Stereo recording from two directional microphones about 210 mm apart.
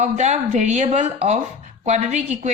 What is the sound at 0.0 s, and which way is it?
Speech, 35° right (ahead or behind).